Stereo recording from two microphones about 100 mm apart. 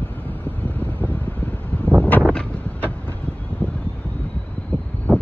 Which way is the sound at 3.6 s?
15° left (ahead or behind).